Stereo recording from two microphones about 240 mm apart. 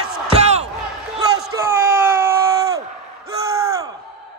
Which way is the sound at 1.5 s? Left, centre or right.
Centre.